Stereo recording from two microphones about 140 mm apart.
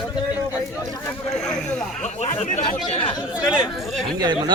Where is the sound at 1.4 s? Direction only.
5° left (ahead or behind).